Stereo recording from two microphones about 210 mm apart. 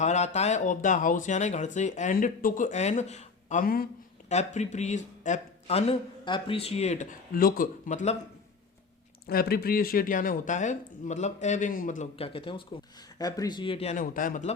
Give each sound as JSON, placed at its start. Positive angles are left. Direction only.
{"t": 0.0, "sound": "speech", "side_deg": 35}
{"t": 9.2, "sound": "speech", "side_deg": 50}